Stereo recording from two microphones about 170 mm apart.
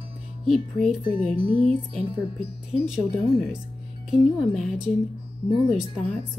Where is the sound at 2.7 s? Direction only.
5° right (ahead or behind).